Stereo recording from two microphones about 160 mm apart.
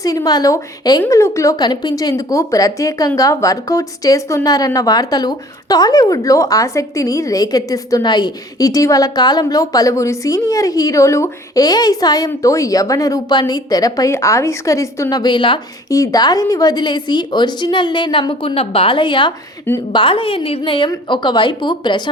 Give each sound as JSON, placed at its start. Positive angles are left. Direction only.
{"t": 0.0, "sound": "a woman's voice", "side_deg": 20}